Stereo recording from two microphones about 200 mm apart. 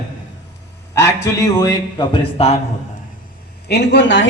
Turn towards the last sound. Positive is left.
turn(degrees=65)  # may be behind; listen again after turning